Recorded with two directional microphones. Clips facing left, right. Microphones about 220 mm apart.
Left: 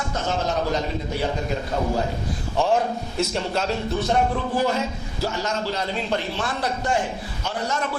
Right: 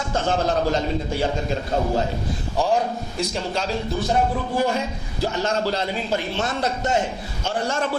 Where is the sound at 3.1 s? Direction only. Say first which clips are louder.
Left 2 dB; centre (ahead or behind).